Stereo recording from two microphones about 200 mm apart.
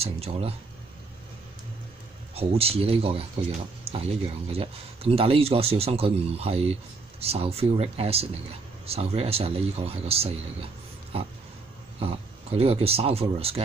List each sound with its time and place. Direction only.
0.0 s speech: 30° right (ahead or behind)
2.3 s speech: 30° right (ahead or behind)
12.0 s speech: 30° right (ahead or behind)